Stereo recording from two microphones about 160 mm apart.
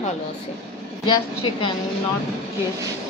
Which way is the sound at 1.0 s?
30° left (ahead or behind).